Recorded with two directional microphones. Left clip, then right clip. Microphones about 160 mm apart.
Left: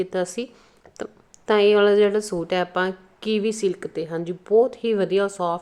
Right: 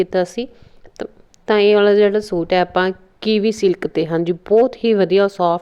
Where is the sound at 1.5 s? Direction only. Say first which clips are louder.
Right 4 dB; 20° right (ahead or behind).